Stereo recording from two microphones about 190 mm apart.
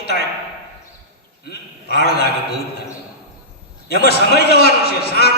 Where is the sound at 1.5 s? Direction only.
60° left (ahead or behind).